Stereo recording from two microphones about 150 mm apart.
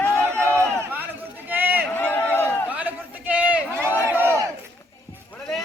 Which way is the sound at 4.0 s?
15° right (ahead or behind).